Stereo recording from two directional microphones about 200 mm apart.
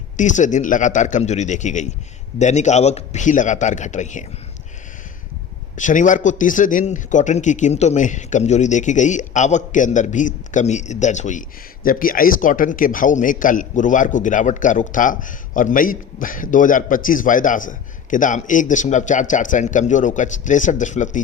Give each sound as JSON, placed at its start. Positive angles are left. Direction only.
{"t": 0.2, "sound": "a man's voice", "side_deg": 40}
{"t": 5.7, "sound": "a man's voice", "side_deg": 40}